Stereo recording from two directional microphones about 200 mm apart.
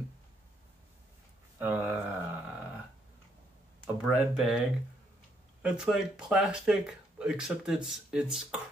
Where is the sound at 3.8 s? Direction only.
Centre (ahead or behind).